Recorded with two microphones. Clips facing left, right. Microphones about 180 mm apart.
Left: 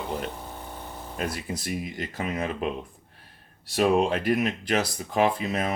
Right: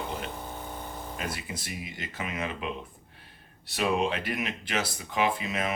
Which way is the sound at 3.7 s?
45° left (ahead or behind).